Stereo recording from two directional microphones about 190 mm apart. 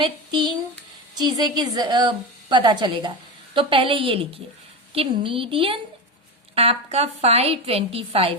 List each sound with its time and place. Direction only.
0.0 s a woman's voice: 25° right (ahead or behind)